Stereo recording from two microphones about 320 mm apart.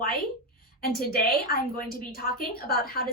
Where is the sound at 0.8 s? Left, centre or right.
Left.